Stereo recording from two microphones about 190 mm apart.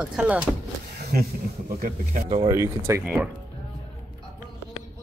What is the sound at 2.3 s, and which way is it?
Speech, 25° right (ahead or behind).